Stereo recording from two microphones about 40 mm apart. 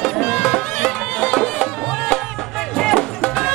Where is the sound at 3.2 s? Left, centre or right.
Left.